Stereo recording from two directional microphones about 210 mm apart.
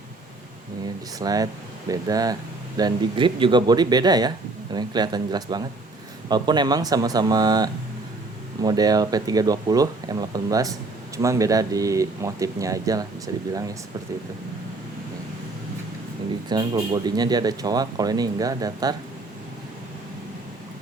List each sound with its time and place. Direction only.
1.2 s speech: 15° right (ahead or behind)
16.5 s speech: 20° right (ahead or behind)